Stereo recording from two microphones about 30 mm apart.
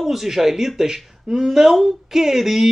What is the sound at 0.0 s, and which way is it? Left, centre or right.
A woman's voice, centre.